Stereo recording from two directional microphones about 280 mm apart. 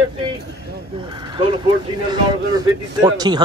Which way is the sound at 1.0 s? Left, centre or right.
Centre.